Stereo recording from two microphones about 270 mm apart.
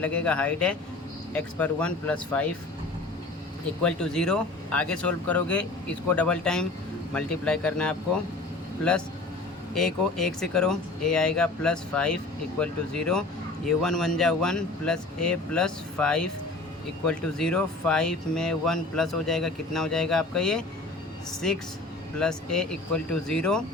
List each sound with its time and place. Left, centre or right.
0.0 s speech: centre
3.8 s speech: centre
22.5 s speech: centre